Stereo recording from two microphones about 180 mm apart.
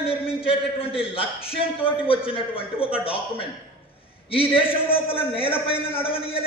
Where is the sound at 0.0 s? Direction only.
30° left (ahead or behind).